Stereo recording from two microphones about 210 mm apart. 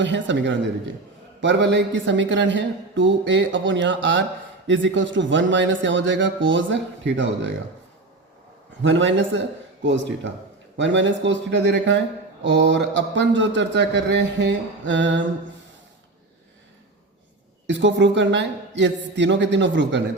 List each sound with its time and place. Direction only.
0.0 s speech: 60° right (ahead or behind)
8.8 s speech: 60° right (ahead or behind)
17.7 s speech: 60° right (ahead or behind)